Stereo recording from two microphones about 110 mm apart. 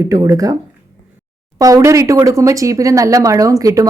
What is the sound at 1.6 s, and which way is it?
Speech, 35° right (ahead or behind).